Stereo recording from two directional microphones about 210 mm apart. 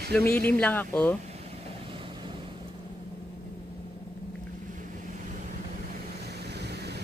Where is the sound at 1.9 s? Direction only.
25° right (ahead or behind).